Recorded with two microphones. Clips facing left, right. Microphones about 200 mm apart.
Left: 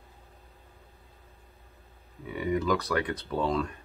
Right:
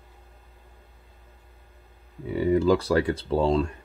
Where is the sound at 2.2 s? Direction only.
30° right (ahead or behind).